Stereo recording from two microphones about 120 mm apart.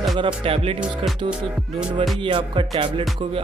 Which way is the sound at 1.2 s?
40° right (ahead or behind).